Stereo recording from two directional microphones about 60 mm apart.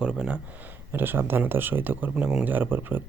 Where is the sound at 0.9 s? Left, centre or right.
Right.